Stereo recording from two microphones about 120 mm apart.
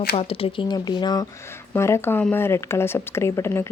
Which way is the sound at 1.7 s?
20° left (ahead or behind).